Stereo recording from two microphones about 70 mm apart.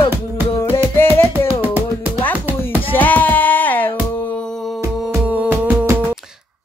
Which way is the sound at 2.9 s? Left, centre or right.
Left.